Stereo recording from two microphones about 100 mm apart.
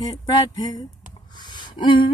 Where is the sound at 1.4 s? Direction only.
50° left (ahead or behind).